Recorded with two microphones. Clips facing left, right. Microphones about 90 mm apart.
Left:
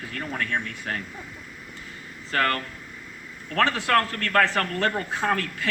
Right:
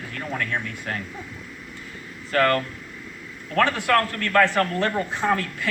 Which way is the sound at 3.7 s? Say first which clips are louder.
Right 1 dB; 30° left (ahead or behind).